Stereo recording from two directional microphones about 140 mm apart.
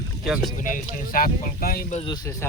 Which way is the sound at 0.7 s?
80° left.